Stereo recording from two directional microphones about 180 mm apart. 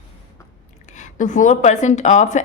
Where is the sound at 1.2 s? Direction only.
45° left (ahead or behind).